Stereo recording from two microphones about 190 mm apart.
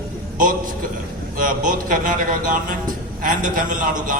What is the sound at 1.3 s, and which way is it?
A man's voice, 45° right (ahead or behind).